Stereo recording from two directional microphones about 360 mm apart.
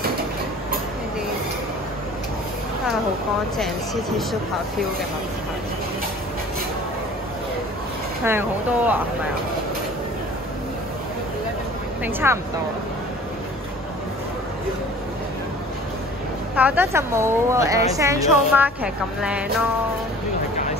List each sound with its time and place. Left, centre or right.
3.5 s speech: centre
8.2 s speech: centre
12.0 s speech: centre
16.5 s a woman's voice: centre